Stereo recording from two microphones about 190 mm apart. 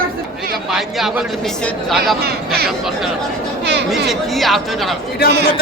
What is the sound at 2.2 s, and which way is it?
Speech, 55° right (ahead or behind).